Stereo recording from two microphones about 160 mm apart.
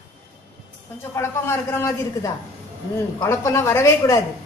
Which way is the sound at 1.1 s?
15° left (ahead or behind).